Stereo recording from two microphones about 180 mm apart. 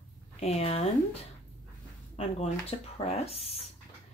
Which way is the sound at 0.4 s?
35° left (ahead or behind).